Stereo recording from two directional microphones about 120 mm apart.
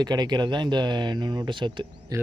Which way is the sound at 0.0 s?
35° right (ahead or behind).